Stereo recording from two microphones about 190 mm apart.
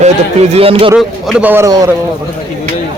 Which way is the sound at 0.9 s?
5° right (ahead or behind).